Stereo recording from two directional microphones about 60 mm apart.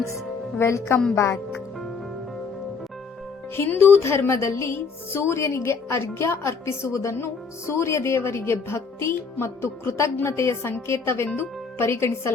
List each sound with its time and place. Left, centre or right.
0.6 s a woman's voice: left
3.8 s a woman's voice: left